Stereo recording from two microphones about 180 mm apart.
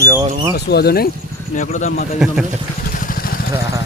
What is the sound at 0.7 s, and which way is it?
Speech, 60° left (ahead or behind).